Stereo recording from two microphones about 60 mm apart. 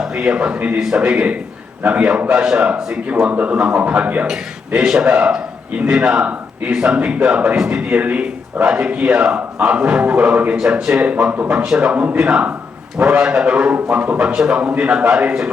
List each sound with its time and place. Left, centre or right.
0.0 s a man's voice: centre
0.8 s a man's voice: centre
3.1 s speech: right
4.3 s a man's voice: centre
11.0 s a man's voice: right